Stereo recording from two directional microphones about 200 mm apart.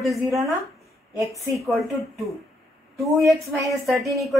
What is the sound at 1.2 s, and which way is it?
Speech, 15° right (ahead or behind).